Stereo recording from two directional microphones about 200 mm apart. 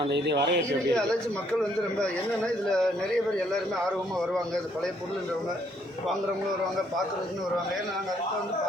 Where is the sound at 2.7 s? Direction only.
5° left (ahead or behind).